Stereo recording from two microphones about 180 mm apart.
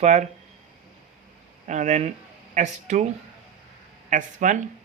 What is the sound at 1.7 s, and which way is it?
Speech, 40° right (ahead or behind).